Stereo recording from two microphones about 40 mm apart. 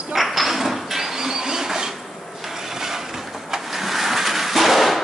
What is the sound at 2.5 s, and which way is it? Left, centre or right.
Vehicle, centre.